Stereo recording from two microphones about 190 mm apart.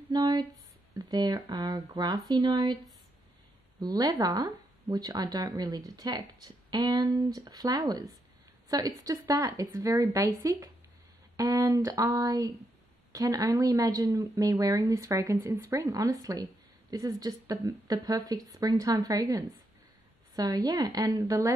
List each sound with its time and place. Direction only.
0.1 s a sound: 20° right (ahead or behind)
0.9 s speech: 20° right (ahead or behind)
3.8 s a woman's voice: 20° right (ahead or behind)